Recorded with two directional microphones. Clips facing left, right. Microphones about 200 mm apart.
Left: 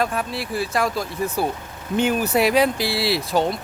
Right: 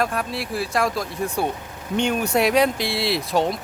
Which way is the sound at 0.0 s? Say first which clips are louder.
Even; centre (ahead or behind).